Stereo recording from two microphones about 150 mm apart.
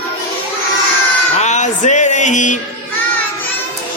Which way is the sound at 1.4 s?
50° left (ahead or behind).